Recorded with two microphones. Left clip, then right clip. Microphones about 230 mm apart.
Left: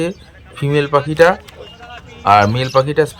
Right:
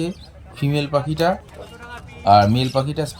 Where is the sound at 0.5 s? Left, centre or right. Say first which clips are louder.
Left 7 dB; left.